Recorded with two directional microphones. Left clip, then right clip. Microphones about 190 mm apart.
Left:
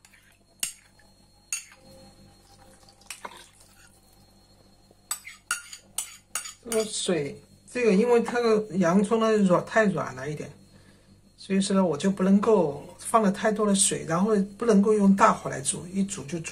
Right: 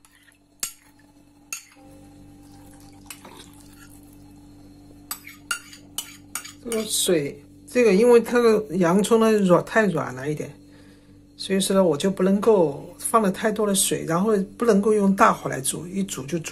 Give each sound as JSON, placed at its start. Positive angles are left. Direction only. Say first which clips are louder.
{"t": 6.7, "sound": "speech", "louder": "right 4 dB", "side_deg": -35}